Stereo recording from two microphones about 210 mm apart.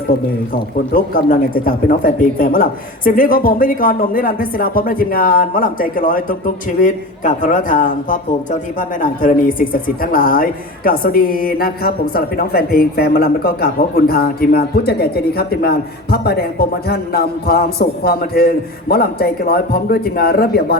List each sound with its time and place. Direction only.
0.1 s a man's voice: 50° left (ahead or behind)